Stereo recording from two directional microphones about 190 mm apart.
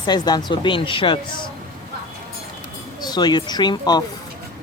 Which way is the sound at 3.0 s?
20° left (ahead or behind).